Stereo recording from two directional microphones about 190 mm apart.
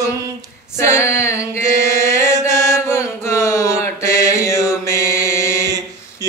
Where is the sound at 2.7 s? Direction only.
15° left (ahead or behind).